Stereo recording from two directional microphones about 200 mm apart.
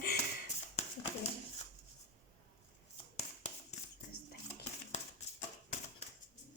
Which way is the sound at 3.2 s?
35° left (ahead or behind).